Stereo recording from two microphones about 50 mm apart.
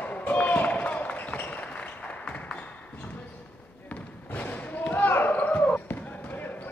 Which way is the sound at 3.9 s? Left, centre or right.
Left.